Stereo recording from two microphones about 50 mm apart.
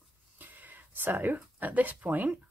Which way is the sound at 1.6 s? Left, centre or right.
Right.